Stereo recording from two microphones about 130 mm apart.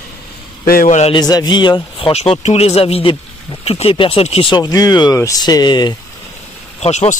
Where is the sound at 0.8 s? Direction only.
70° left (ahead or behind).